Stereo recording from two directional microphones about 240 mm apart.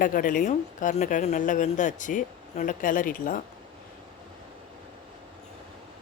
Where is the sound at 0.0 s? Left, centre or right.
Left.